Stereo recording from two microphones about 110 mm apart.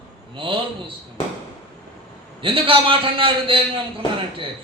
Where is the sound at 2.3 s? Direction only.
55° right (ahead or behind).